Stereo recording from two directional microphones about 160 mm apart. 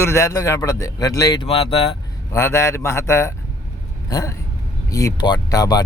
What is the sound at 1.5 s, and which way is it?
Speech, 35° left (ahead or behind).